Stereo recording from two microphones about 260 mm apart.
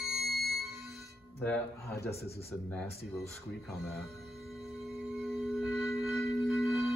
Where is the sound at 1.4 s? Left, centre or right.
Centre.